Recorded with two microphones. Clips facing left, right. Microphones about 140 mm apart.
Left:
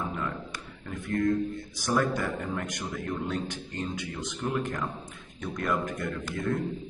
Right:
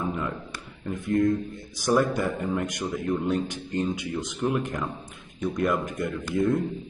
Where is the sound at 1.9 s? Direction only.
15° right (ahead or behind).